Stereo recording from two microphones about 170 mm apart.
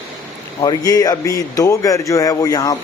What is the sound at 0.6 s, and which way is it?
Speech, 20° left (ahead or behind).